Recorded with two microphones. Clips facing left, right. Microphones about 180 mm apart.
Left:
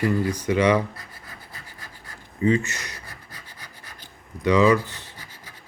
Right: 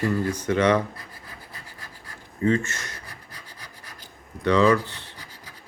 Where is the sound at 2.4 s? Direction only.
15° left (ahead or behind).